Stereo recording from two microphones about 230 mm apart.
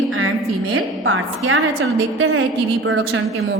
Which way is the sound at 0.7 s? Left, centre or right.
Right.